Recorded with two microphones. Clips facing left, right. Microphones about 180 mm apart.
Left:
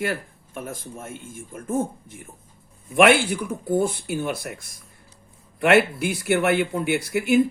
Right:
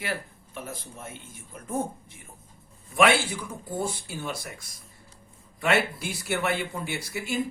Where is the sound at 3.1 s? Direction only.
65° left (ahead or behind).